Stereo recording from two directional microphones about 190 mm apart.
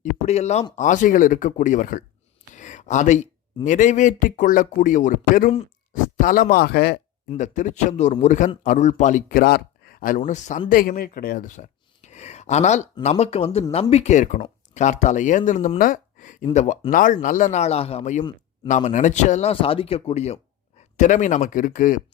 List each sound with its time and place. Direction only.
0.0 s speech: 35° left (ahead or behind); by 7.0 s 60° left (ahead or behind)
7.3 s speech: 40° left (ahead or behind)